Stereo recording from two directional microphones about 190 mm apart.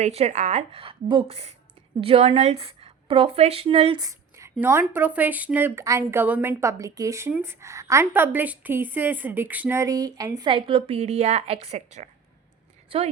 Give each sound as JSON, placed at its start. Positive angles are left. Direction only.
{"t": 0.0, "sound": "a woman's voice", "side_deg": -35}